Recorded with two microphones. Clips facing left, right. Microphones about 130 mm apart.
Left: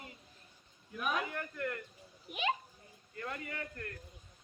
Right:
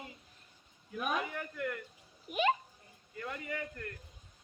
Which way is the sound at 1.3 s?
15° right (ahead or behind).